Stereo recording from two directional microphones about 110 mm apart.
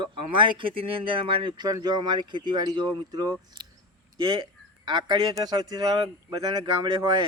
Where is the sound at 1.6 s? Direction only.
35° right (ahead or behind).